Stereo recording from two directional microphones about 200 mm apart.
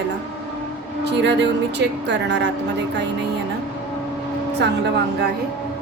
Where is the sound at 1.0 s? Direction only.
60° right (ahead or behind).